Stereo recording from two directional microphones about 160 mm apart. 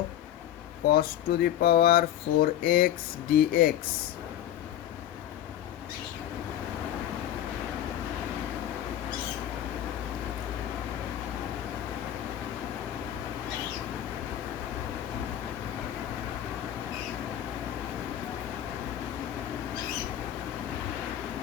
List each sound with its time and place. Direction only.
0.9 s speech: 70° left (ahead or behind)